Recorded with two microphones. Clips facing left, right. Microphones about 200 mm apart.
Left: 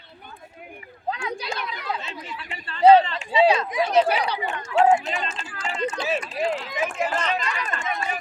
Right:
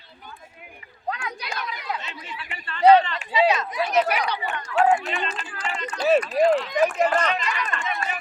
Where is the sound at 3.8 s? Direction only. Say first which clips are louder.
Left 2 dB; 30° left (ahead or behind).